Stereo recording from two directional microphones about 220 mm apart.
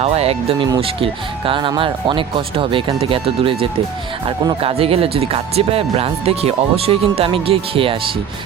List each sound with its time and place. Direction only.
0.0 s speech: 30° right (ahead or behind)